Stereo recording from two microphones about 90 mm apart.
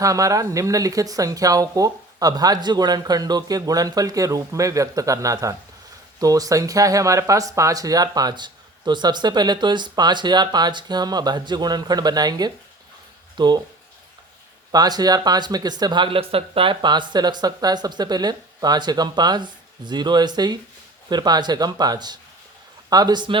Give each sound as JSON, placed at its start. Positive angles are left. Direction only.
{"t": 0.0, "sound": "speech", "side_deg": -40}
{"t": 14.7, "sound": "speech", "side_deg": -45}